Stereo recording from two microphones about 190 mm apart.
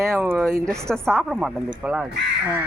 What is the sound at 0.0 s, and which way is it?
Speech, 15° right (ahead or behind).